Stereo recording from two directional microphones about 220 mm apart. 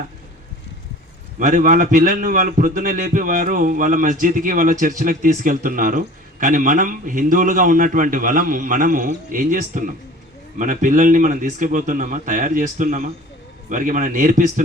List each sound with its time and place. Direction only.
1.4 s a man's voice: 35° right (ahead or behind)